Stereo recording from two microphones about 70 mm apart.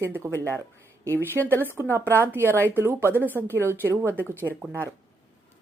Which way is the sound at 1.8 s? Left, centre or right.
Right.